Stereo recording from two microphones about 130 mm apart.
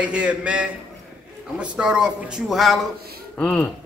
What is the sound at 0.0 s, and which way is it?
A man's voice, 10° right (ahead or behind).